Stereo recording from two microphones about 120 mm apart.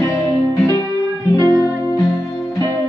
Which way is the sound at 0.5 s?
25° left (ahead or behind).